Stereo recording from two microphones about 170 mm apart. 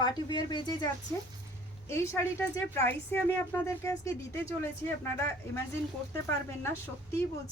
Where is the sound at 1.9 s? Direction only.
15° left (ahead or behind).